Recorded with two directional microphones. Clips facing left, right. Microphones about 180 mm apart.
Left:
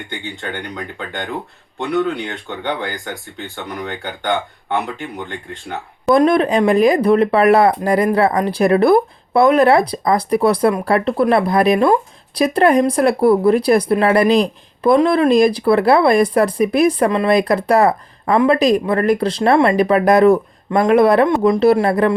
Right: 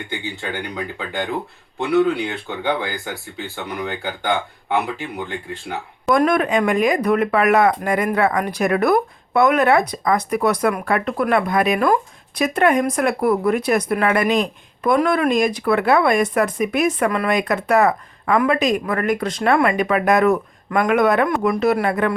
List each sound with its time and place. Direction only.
0.5 s speech: 5° right (ahead or behind)
6.1 s speech: 30° left (ahead or behind)